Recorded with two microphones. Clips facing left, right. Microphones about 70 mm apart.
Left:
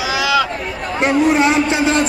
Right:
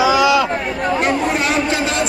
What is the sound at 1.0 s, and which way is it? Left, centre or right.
Speech, left.